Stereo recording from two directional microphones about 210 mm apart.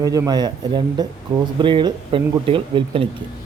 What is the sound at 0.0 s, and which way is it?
A man's voice, 15° right (ahead or behind).